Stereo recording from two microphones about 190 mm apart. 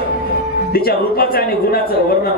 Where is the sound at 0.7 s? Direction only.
55° left (ahead or behind).